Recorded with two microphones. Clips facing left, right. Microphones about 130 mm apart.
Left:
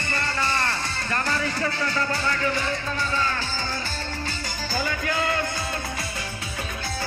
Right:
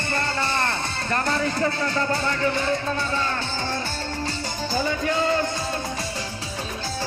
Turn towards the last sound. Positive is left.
turn(degrees=-25)  # may be behind; listen again after turning